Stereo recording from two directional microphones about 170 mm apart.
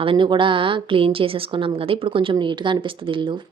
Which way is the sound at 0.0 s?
30° right (ahead or behind).